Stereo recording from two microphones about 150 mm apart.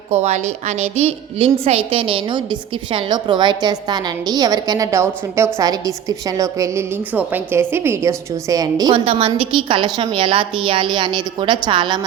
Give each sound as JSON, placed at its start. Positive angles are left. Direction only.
{"t": 0.1, "sound": "a woman's voice", "side_deg": -50}
{"t": 9.0, "sound": "a woman's voice", "side_deg": -40}